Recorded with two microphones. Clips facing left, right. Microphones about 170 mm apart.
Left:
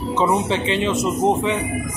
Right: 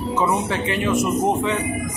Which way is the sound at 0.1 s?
20° left (ahead or behind).